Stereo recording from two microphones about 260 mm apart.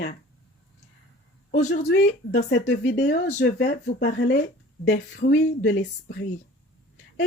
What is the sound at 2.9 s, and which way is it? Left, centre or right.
Speech, left.